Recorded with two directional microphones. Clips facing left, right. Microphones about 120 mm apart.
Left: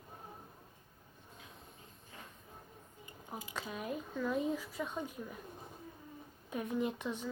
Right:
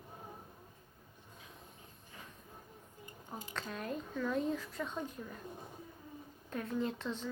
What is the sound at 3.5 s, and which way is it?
Speech, 10° left (ahead or behind).